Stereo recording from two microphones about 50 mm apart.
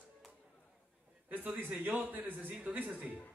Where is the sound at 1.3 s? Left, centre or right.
Right.